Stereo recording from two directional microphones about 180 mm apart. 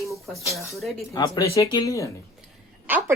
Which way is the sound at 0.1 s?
Centre (ahead or behind).